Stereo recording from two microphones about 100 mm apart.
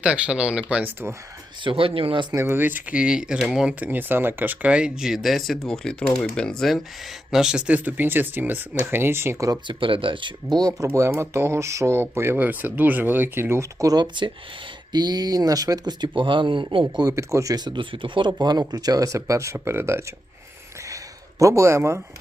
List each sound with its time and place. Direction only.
0.0 s speech: 10° right (ahead or behind)
1.6 s speech: 65° right (ahead or behind)
2.3 s speech: 25° right (ahead or behind)
9.5 s speech: 55° right (ahead or behind); by 10.8 s 40° right (ahead or behind)
10.9 s speech: 25° right (ahead or behind)
15.9 s speech: 50° right (ahead or behind)
17.0 s speech: 35° right (ahead or behind)
20.8 s a sound: 35° right (ahead or behind)